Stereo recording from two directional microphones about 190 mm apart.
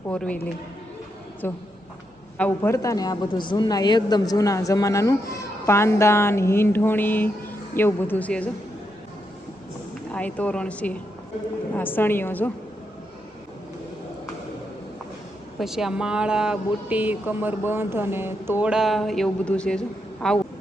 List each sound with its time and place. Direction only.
0.1 s speech: 5° left (ahead or behind)
1.4 s a woman's voice: 10° left (ahead or behind)
10.1 s a woman's voice: 5° left (ahead or behind)
15.5 s speech: centre (ahead or behind)